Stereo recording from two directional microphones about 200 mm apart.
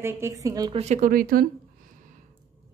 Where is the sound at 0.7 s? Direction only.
35° right (ahead or behind).